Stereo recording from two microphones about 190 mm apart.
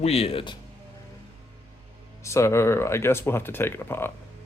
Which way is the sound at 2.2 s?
15° left (ahead or behind).